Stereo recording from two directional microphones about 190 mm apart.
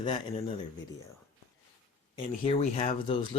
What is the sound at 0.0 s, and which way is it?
Speech, 25° left (ahead or behind).